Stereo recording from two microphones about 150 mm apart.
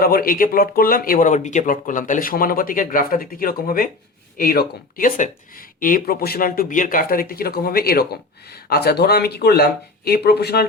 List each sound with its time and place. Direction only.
0.0 s speech: 80° left